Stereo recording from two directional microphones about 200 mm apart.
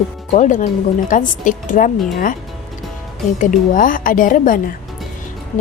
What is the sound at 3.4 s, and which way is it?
A woman's voice, 40° left (ahead or behind).